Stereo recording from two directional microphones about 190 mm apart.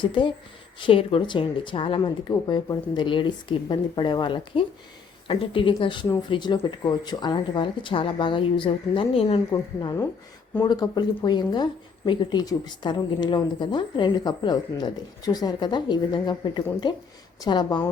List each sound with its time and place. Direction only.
0.0 s speech: 25° left (ahead or behind)
9.5 s a woman's voice: 15° left (ahead or behind)